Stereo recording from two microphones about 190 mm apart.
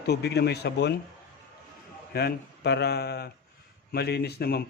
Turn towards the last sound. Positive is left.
turn(degrees=55)  # may be behind; listen again after turning